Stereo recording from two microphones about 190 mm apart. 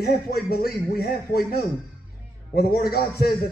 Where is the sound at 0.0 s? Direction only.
55° left (ahead or behind).